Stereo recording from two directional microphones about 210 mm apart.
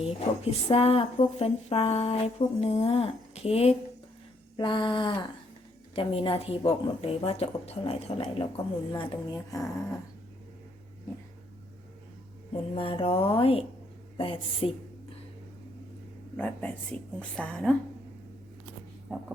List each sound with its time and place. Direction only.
0.0 s speech: 30° left (ahead or behind)
8.9 s speech: 15° left (ahead or behind)
12.7 s speech: 25° left (ahead or behind)
16.4 s a woman's voice: 5° left (ahead or behind)
19.1 s a woman's voice: centre (ahead or behind)